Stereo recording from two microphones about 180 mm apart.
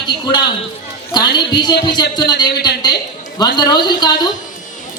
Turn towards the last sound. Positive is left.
turn(degrees=25)  # may be behind; listen again after turning